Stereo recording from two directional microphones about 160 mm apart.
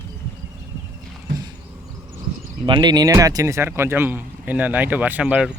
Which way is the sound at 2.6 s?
30° right (ahead or behind).